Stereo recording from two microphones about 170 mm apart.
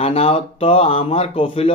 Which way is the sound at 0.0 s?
35° left (ahead or behind).